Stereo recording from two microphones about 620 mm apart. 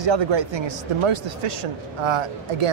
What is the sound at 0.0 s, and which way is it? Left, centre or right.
Speech, right.